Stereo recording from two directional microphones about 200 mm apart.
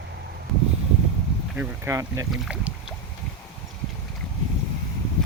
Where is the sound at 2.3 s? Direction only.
5° right (ahead or behind).